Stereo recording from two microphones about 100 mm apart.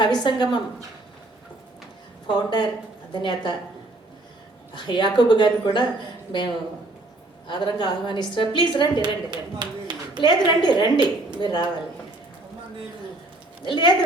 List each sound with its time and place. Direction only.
0.0 s a woman's voice: 50° left (ahead or behind)
2.2 s a woman's voice: 50° left (ahead or behind)
4.7 s a woman's voice: 50° left (ahead or behind)
7.4 s a woman's voice: 50° left (ahead or behind)
9.0 s speech: 50° right (ahead or behind)
10.2 s a woman's voice: 45° left (ahead or behind)
13.7 s a woman's voice: 50° left (ahead or behind)